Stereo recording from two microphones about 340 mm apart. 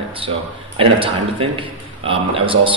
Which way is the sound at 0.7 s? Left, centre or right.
Centre.